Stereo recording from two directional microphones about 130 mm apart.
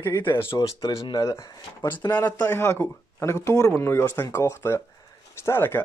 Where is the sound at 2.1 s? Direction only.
15° left (ahead or behind).